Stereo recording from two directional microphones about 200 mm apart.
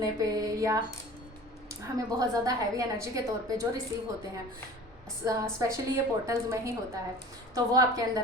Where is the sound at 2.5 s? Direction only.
15° right (ahead or behind).